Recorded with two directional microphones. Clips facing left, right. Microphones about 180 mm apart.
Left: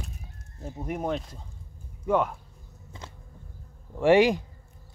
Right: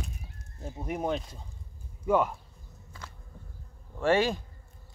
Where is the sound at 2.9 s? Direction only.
20° left (ahead or behind).